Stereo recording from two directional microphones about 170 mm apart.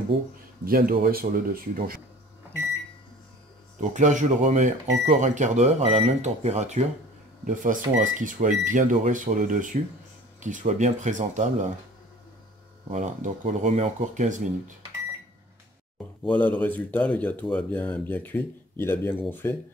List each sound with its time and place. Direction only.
0.1 s speech: 30° right (ahead or behind)
0.7 s speech: 60° right (ahead or behind)
3.9 s speech: 45° right (ahead or behind)
12.9 s speech: 45° right (ahead or behind)
16.3 s speech: 10° left (ahead or behind)